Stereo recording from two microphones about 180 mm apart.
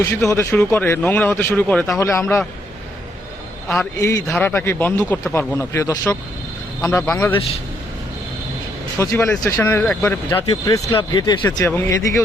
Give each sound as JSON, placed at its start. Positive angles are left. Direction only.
{"t": 0.0, "sound": "speech", "side_deg": 15}
{"t": 4.0, "sound": "speech", "side_deg": 15}
{"t": 9.0, "sound": "speech", "side_deg": 15}